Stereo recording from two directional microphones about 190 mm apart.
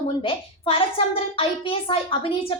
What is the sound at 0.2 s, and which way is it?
A woman's voice, 30° left (ahead or behind).